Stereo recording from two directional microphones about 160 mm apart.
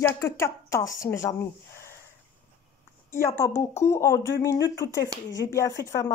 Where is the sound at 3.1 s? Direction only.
15° left (ahead or behind).